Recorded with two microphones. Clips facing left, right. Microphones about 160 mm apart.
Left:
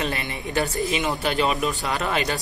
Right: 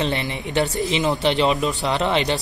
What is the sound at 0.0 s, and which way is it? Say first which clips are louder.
Speech: right 4 dB; 25° right (ahead or behind).